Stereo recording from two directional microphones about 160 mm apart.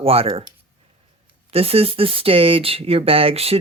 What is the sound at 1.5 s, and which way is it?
Speech, 40° right (ahead or behind).